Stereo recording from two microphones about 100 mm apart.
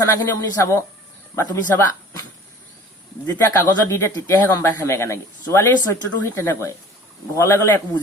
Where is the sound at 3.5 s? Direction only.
30° left (ahead or behind).